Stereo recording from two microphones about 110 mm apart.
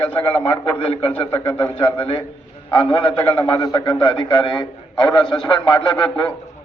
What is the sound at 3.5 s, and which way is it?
A man's voice, 40° left (ahead or behind).